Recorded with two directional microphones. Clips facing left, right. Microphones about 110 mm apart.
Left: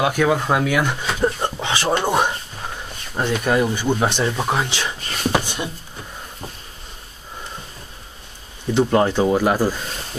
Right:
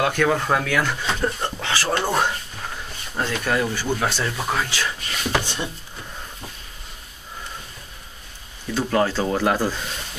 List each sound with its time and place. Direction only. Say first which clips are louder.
0.0 s speech: left 2 dB; 10° left (ahead or behind)
5.0 s a sound: left 4 dB; 40° left (ahead or behind)
5.3 s speech: left 1 dB; 15° left (ahead or behind)
8.7 s speech: left 4 dB; 20° left (ahead or behind)